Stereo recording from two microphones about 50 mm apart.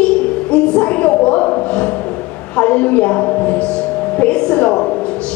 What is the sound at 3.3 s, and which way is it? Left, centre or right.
Music, left.